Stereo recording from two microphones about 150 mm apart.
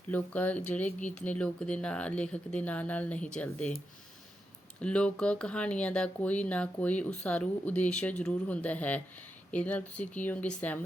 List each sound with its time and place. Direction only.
0.1 s speech: 10° left (ahead or behind)
0.9 s speech: 55° left (ahead or behind)
1.1 s speech: 10° left (ahead or behind)
4.8 s speech: 5° left (ahead or behind)